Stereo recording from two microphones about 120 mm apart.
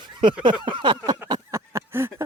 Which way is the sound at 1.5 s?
25° right (ahead or behind).